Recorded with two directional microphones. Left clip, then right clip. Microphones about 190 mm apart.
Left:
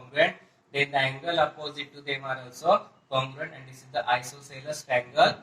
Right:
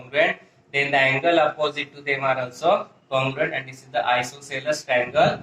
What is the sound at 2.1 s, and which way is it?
Speech, 10° right (ahead or behind).